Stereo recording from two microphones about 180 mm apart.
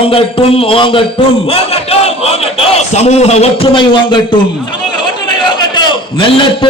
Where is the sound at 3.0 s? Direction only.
35° left (ahead or behind).